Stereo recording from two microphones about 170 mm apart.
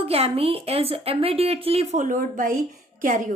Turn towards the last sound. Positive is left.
turn(degrees=-50)  # may be behind; listen again after turning